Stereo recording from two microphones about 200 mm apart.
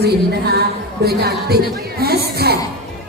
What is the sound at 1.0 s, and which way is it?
Speech, 50° right (ahead or behind).